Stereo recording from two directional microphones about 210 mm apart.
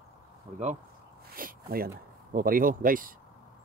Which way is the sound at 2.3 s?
40° right (ahead or behind).